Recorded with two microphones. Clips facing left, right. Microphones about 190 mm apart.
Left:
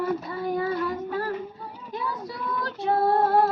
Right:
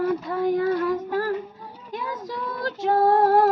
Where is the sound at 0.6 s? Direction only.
45° right (ahead or behind).